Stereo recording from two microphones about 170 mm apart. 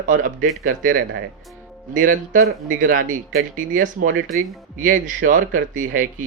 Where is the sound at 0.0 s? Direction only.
50° right (ahead or behind).